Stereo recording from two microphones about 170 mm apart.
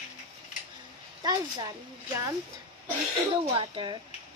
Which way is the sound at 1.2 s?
25° right (ahead or behind).